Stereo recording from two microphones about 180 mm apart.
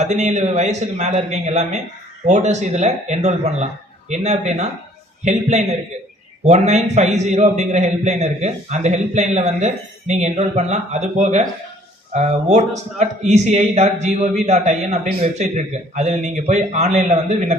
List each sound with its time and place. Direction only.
0.0 s a man's voice: 40° right (ahead or behind)